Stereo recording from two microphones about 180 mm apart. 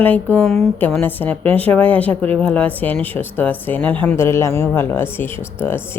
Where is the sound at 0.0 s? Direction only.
10° left (ahead or behind).